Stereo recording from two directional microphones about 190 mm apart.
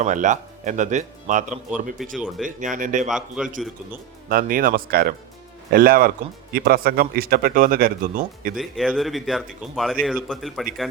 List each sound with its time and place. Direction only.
0.0 s speech: 40° right (ahead or behind)
2.0 s speech: centre (ahead or behind)
2.4 s speech: 40° right (ahead or behind)
3.1 s speech: 5° right (ahead or behind)
4.3 s speech: 50° right (ahead or behind)
8.5 s speech: centre (ahead or behind)